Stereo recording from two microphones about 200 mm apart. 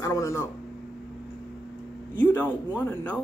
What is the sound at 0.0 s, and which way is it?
Speech, 15° left (ahead or behind).